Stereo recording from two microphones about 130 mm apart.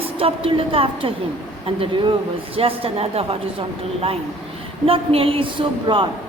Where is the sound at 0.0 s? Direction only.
45° right (ahead or behind).